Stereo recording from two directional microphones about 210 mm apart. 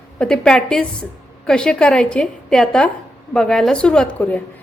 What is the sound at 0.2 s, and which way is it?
A woman's voice, 5° left (ahead or behind).